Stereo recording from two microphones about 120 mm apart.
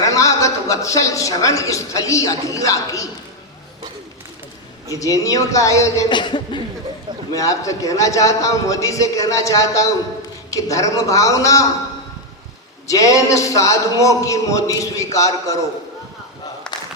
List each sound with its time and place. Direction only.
0.0 s a woman's voice: 30° left (ahead or behind)
4.9 s a man's voice: 30° left (ahead or behind)
6.1 s speech: 40° left (ahead or behind)
7.3 s a man's voice: 25° left (ahead or behind)
12.9 s a man's voice: 30° left (ahead or behind)
16.7 s battle cry: 5° left (ahead or behind)